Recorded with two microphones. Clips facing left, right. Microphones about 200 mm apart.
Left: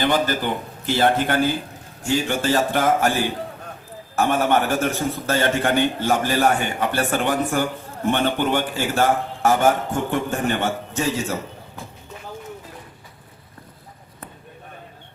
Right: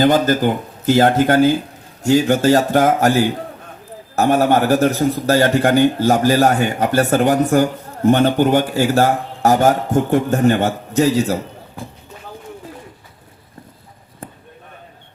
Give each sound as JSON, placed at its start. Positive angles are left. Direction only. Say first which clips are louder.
{"t": 0.0, "sound": "a man's voice", "louder": "right 7 dB", "side_deg": -45}